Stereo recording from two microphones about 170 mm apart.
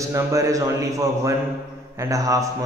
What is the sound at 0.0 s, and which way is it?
A man's voice, 20° right (ahead or behind).